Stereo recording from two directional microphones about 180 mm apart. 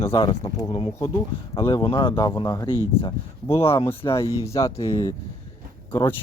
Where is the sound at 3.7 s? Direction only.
15° left (ahead or behind).